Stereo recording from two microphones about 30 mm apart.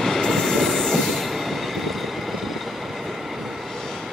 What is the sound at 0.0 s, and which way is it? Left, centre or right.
Train, centre.